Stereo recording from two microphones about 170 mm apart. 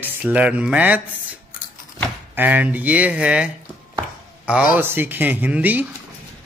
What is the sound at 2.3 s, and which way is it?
Speech, 10° right (ahead or behind).